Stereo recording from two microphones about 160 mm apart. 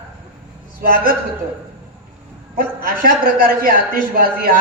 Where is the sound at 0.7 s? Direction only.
65° right (ahead or behind).